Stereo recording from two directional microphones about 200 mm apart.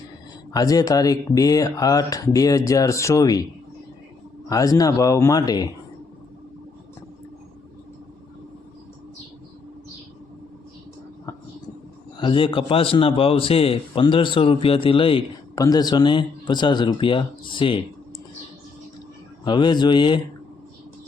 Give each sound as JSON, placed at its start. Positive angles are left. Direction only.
{"t": 0.5, "sound": "speech", "side_deg": 20}
{"t": 4.4, "sound": "speech", "side_deg": 15}
{"t": 12.1, "sound": "a man's voice", "side_deg": 25}
{"t": 19.5, "sound": "a man's voice", "side_deg": 20}